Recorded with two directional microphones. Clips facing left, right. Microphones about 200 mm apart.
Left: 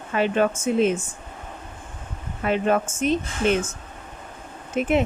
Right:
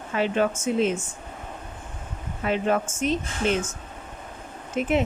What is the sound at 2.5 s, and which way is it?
Speech, 55° left (ahead or behind).